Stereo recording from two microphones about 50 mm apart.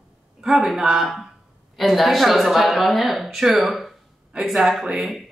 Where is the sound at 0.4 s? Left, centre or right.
Centre.